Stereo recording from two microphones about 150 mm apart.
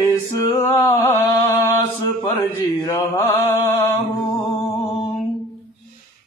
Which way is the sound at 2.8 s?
25° left (ahead or behind).